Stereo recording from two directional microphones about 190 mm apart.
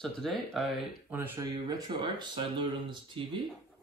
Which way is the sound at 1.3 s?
25° right (ahead or behind).